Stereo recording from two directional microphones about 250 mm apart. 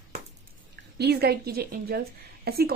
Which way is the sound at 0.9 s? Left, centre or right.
Right.